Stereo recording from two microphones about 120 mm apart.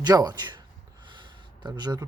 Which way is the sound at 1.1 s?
40° right (ahead or behind).